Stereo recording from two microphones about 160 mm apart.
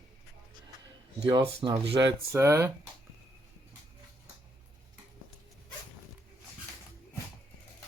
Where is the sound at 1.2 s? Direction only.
25° right (ahead or behind).